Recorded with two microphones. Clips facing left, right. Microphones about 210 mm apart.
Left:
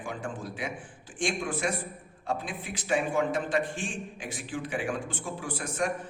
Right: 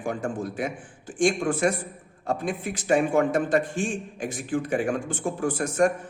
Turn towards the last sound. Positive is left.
turn(degrees=-45)  # may be behind; listen again after turning